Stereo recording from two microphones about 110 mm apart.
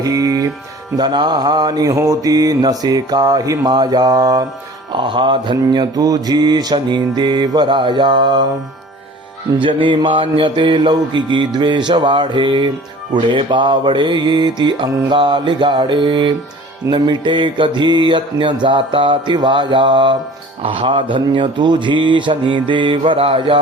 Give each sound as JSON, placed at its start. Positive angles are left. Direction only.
{"t": 0.0, "sound": "music", "side_deg": -35}
{"t": 0.9, "sound": "mantra", "side_deg": -45}
{"t": 4.9, "sound": "mantra", "side_deg": -50}
{"t": 9.6, "sound": "mantra", "side_deg": -50}
{"t": 20.6, "sound": "mantra", "side_deg": -55}